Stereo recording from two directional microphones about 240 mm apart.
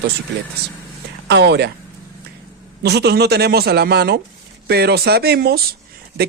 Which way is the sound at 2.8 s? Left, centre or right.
Right.